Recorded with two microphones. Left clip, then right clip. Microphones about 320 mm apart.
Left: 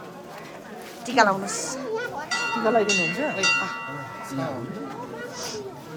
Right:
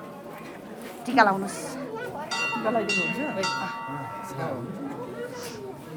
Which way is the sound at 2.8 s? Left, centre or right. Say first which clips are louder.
Left 3 dB; centre.